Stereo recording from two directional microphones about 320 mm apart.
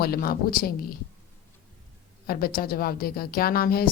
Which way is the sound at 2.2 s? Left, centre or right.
Left.